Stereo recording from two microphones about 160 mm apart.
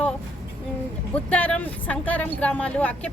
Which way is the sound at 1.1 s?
10° left (ahead or behind).